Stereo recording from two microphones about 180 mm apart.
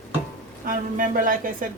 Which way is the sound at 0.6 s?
50° right (ahead or behind).